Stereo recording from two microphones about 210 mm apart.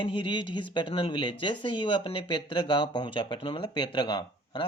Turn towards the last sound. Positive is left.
turn(degrees=20)  # may be behind; listen again after turning